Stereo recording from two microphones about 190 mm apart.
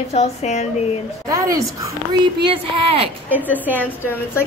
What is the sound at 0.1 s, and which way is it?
Speech, 35° left (ahead or behind).